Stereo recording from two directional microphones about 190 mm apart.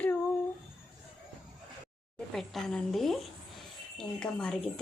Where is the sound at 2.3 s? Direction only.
Centre (ahead or behind).